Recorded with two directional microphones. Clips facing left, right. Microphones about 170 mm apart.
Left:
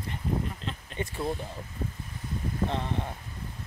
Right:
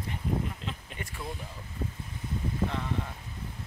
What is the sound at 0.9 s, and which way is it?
Speech, 30° left (ahead or behind).